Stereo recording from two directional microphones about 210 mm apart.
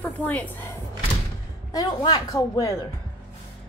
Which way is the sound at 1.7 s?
20° left (ahead or behind).